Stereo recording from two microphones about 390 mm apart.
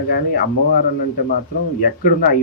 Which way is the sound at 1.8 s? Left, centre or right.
Left.